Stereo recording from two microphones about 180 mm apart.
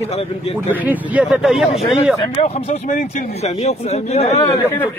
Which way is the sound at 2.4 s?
35° left (ahead or behind).